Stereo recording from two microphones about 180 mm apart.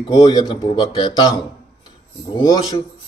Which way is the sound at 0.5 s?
25° left (ahead or behind).